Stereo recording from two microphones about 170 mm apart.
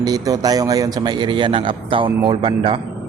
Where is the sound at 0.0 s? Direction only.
20° right (ahead or behind).